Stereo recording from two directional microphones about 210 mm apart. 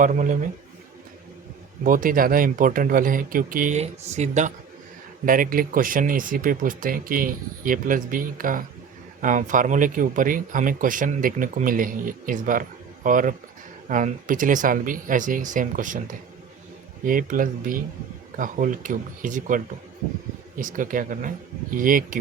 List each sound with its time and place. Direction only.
0.0 s speech: 40° right (ahead or behind)
1.8 s speech: 40° right (ahead or behind)
17.1 s speech: 40° right (ahead or behind)